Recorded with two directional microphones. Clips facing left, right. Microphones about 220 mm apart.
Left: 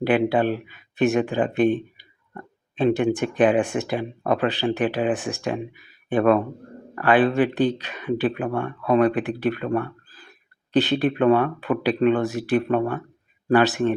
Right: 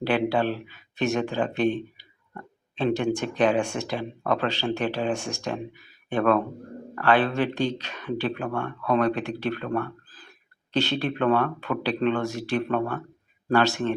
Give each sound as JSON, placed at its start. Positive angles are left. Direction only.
{"t": 0.0, "sound": "speech", "side_deg": 15}